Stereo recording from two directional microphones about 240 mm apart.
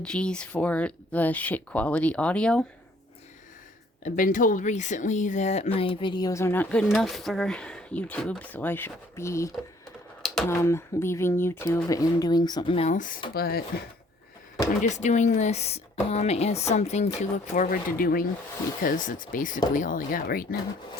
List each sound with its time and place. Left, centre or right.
0.0 s speech: centre
4.0 s speech: left; by 9.6 s centre
10.2 s computer keyboard: centre
10.6 s speech: centre; by 13.8 s left
14.8 s speech: left